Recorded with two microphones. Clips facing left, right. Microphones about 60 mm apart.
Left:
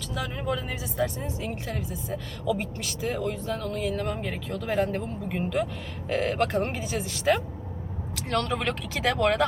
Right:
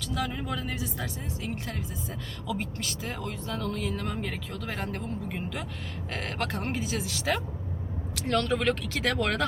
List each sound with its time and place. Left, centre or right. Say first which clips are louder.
0.0 s speech: even; centre